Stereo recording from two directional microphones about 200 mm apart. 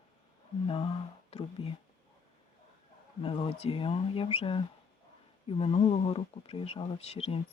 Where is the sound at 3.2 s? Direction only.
30° left (ahead or behind).